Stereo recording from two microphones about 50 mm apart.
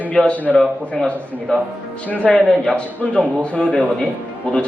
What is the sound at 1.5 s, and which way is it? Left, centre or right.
A man's voice, left.